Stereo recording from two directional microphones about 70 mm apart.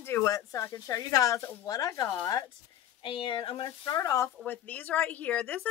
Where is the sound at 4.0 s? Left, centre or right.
Left.